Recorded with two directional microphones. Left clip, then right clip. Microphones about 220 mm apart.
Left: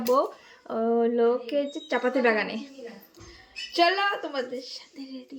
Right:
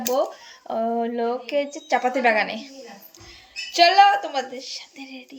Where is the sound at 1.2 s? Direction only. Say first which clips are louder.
Right 1 dB; 15° left (ahead or behind).